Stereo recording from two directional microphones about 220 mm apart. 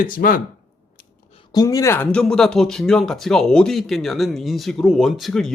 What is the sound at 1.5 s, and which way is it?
Speech, 15° left (ahead or behind).